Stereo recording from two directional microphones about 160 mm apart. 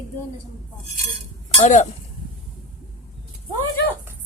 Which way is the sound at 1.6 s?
50° left (ahead or behind).